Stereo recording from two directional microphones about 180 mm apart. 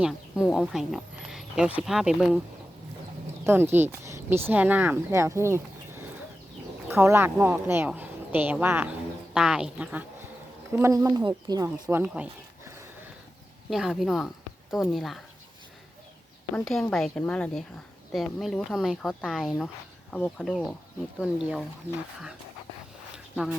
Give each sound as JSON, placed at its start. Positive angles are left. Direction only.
{"t": 0.0, "sound": "speech", "side_deg": -5}
{"t": 3.4, "sound": "speech", "side_deg": -10}
{"t": 16.6, "sound": "speech", "side_deg": 0}
{"t": 23.1, "sound": "a sound", "side_deg": -5}